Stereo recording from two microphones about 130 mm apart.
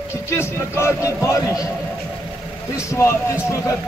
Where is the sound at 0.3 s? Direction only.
20° left (ahead or behind).